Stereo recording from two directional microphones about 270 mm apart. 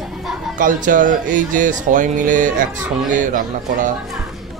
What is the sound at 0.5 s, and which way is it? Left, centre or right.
Speech, right.